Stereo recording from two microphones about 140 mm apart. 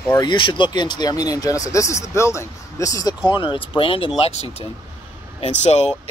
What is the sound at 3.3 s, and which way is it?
A man's voice, 35° left (ahead or behind).